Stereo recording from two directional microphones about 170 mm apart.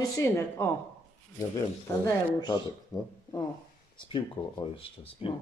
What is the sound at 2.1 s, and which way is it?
Speech, 25° left (ahead or behind).